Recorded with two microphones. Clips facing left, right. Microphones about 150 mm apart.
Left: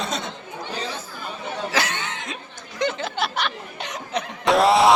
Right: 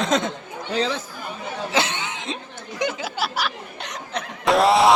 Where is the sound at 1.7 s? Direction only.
20° right (ahead or behind).